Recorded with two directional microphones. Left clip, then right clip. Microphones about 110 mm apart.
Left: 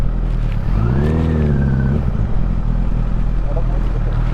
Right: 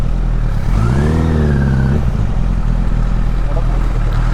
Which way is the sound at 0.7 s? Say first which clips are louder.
Right 2 dB; 35° right (ahead or behind).